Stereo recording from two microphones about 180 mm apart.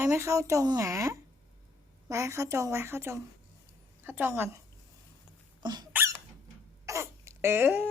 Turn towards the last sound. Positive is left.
turn(degrees=-10)  # may be behind; listen again after turning